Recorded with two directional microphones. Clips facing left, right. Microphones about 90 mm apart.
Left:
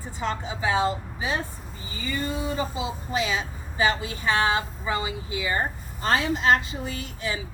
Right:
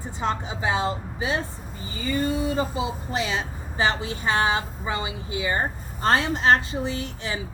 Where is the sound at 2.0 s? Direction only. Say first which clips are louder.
Right 4 dB; 40° right (ahead or behind).